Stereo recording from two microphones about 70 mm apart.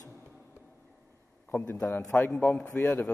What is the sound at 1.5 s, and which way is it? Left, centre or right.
Speech, left.